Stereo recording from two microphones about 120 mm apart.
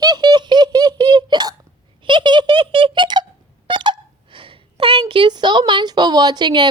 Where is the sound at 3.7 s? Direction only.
40° right (ahead or behind).